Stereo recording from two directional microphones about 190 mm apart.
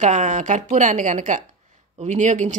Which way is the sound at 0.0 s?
40° right (ahead or behind).